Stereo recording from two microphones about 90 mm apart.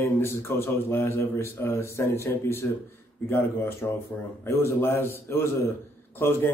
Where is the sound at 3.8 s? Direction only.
30° left (ahead or behind).